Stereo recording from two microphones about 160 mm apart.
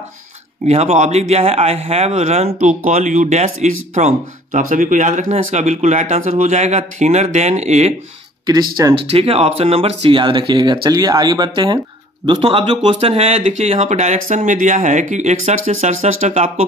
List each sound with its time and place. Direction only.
0.7 s speech: 40° right (ahead or behind)
8.5 s speech: 25° right (ahead or behind)
9.1 s speech: 40° right (ahead or behind)